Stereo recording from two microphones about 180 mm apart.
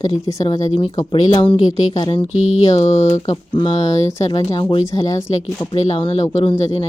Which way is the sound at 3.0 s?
40° left (ahead or behind).